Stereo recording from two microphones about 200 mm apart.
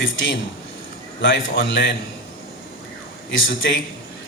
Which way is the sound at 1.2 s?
65° left (ahead or behind).